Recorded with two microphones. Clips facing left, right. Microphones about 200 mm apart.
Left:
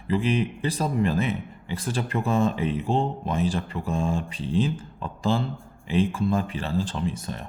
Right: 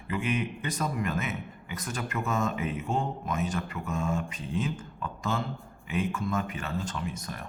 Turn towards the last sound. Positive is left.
turn(degrees=30)  # may be behind; listen again after turning